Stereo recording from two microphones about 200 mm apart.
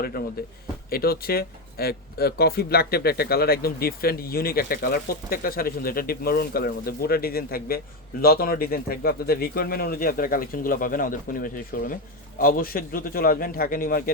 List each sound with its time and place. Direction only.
0.9 s speech: 50° left (ahead or behind)